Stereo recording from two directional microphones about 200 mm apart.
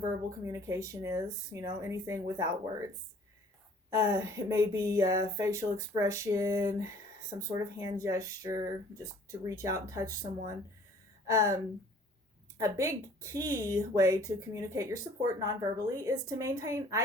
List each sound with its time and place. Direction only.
0.0 s speech: 15° right (ahead or behind)
3.8 s speech: 15° right (ahead or behind)